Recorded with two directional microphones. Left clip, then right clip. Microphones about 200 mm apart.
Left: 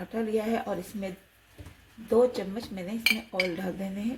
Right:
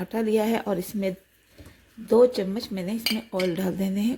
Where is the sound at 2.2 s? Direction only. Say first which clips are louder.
Right 5 dB; 55° right (ahead or behind).